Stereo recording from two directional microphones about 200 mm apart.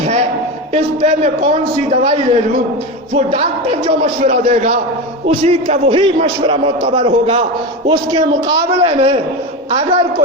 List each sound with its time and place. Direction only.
0.7 s a man's voice: 35° right (ahead or behind)
6.4 s a man's voice: 25° right (ahead or behind)